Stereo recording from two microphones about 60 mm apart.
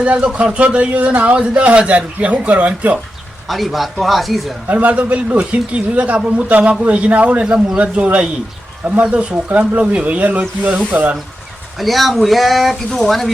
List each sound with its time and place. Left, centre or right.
0.0 s speech: right
3.5 s speech: centre
4.7 s speech: right
11.8 s speech: centre